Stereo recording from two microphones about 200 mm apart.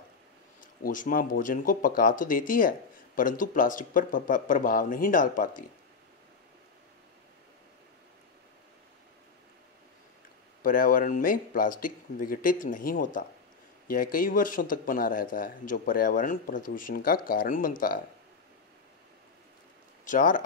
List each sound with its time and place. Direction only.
0.6 s speech: 40° left (ahead or behind)
10.6 s speech: 45° left (ahead or behind)
20.1 s speech: 40° left (ahead or behind)